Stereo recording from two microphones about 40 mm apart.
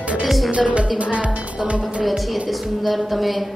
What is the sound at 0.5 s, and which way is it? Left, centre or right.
Speech, right.